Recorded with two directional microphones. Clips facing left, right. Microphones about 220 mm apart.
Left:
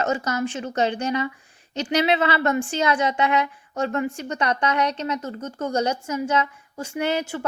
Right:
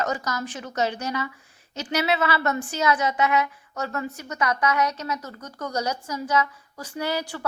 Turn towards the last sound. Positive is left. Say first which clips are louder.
# left 4 dB
turn(degrees=25)  # may be behind; listen again after turning